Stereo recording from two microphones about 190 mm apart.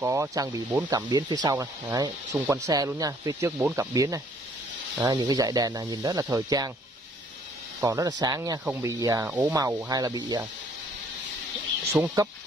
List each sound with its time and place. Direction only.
0.0 s speech: 15° right (ahead or behind)
7.8 s speech: 15° right (ahead or behind)
11.9 s speech: 15° right (ahead or behind)